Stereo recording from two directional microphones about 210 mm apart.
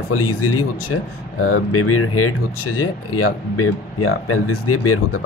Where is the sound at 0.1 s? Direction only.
90° left.